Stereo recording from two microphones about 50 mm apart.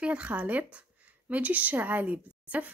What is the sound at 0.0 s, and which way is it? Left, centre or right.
Speech, right.